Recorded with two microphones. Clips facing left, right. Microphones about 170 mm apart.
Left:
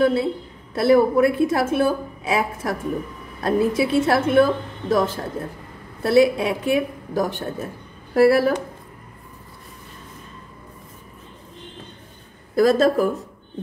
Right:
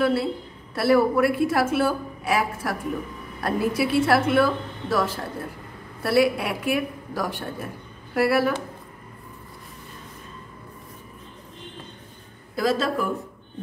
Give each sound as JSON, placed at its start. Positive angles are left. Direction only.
{"t": 0.0, "sound": "a woman's voice", "side_deg": 20}
{"t": 8.1, "sound": "a woman's voice", "side_deg": 30}
{"t": 12.5, "sound": "speech", "side_deg": 45}